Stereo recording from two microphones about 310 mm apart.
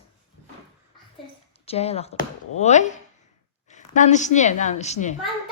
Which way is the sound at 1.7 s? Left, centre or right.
Centre.